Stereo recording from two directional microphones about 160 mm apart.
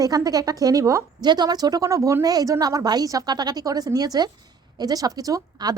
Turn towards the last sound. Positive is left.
turn(degrees=-25)  # may be behind; listen again after turning